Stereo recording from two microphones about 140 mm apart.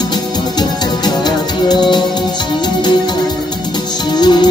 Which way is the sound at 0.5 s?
30° left (ahead or behind).